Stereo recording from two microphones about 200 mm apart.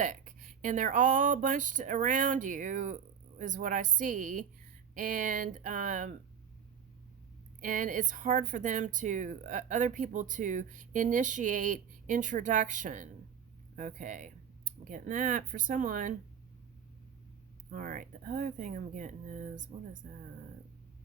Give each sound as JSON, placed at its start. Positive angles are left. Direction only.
{"t": 0.0, "sound": "speech", "side_deg": -40}
{"t": 7.6, "sound": "speech", "side_deg": -40}
{"t": 17.7, "sound": "speech", "side_deg": -45}